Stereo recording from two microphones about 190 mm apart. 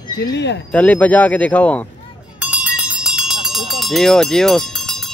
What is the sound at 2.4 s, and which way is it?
Run, 5° right (ahead or behind).